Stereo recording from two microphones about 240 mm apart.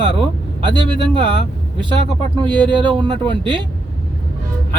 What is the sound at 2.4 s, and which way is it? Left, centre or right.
Speech, centre.